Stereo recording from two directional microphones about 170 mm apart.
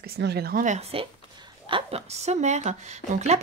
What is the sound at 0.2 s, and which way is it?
Speech, 70° right (ahead or behind).